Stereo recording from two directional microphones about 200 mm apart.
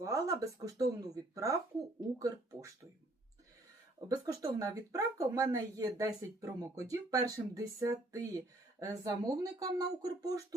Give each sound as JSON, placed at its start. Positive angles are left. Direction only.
{"t": 0.0, "sound": "speech", "side_deg": -15}
{"t": 4.1, "sound": "speech", "side_deg": -15}